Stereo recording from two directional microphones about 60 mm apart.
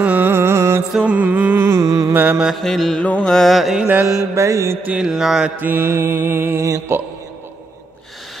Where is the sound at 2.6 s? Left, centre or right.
Centre.